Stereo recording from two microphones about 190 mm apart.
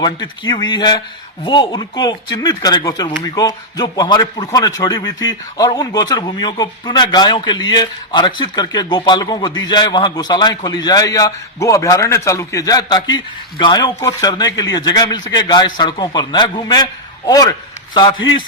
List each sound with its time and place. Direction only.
0.0 s a man's voice: 20° left (ahead or behind)